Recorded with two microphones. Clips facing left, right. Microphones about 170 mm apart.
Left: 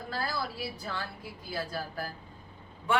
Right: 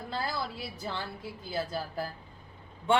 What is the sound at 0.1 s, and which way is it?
A woman's voice, 25° right (ahead or behind).